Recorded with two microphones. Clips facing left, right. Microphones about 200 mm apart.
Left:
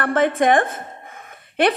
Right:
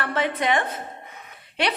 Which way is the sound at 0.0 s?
50° left (ahead or behind).